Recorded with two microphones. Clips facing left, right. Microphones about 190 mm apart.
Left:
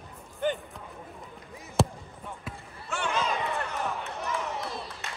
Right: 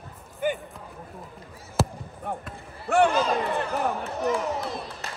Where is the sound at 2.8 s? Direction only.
60° right (ahead or behind).